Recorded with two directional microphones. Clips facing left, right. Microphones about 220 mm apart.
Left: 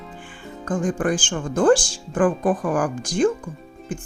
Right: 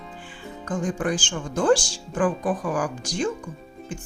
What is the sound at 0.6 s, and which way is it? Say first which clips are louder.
Speech: left 4 dB; 50° left (ahead or behind).